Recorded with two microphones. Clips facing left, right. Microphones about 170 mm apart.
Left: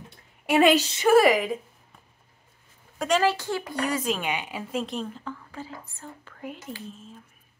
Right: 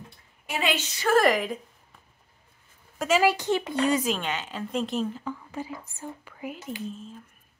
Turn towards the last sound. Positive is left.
turn(degrees=0)  # may be behind; listen again after turning